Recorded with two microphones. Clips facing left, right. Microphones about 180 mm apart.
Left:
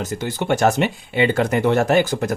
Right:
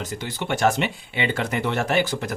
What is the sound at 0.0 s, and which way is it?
Speech, 45° left (ahead or behind).